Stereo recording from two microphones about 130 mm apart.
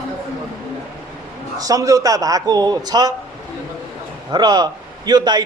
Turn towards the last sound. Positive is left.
turn(degrees=-35)  # may be behind; listen again after turning